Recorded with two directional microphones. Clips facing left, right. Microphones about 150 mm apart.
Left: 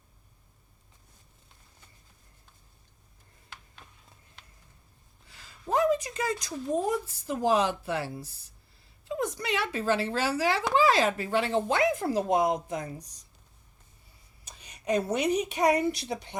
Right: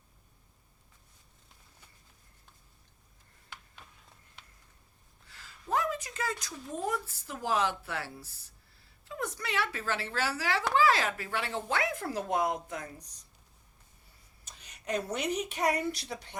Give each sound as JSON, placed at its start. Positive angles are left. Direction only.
{"t": 5.6, "sound": "speech", "side_deg": 20}
{"t": 14.4, "sound": "speech", "side_deg": 10}